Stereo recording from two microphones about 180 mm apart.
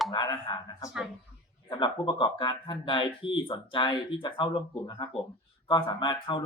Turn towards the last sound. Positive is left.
turn(degrees=25)  # may be behind; listen again after turning